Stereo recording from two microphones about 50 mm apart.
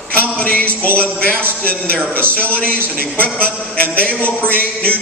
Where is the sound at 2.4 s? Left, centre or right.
Left.